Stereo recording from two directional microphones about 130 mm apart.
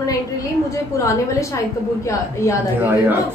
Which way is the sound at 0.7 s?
25° left (ahead or behind).